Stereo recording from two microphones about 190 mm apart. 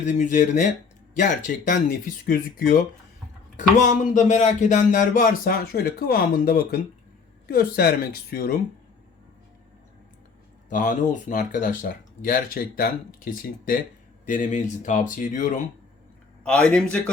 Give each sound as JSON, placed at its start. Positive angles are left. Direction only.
{"t": 0.0, "sound": "speech", "side_deg": 40}
{"t": 10.7, "sound": "speech", "side_deg": 45}
{"t": 16.4, "sound": "a man's voice", "side_deg": 5}